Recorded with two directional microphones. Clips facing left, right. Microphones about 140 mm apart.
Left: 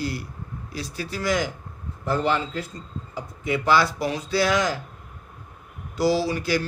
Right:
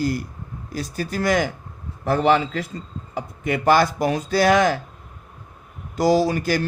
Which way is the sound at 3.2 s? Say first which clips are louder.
Right 2 dB; 55° right (ahead or behind).